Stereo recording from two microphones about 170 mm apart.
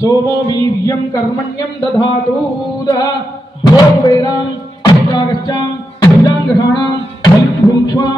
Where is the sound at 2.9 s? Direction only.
25° left (ahead or behind).